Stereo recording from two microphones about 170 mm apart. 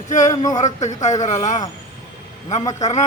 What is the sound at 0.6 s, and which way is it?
Speech, 45° left (ahead or behind).